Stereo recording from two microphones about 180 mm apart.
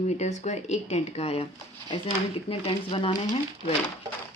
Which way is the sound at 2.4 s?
30° left (ahead or behind).